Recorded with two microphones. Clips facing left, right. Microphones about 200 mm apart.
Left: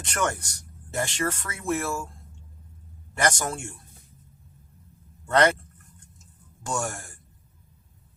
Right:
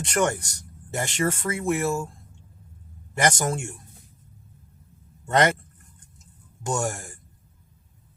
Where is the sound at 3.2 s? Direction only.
20° right (ahead or behind).